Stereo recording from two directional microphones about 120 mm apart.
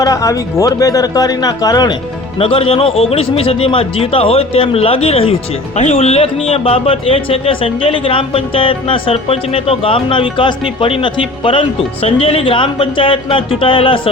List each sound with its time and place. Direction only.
0.0 s speech: 30° left (ahead or behind)
2.4 s a man's voice: 50° left (ahead or behind)